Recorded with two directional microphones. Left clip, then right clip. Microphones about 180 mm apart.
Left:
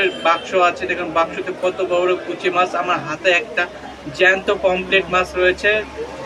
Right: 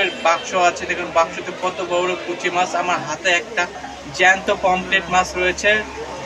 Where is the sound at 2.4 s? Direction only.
20° right (ahead or behind).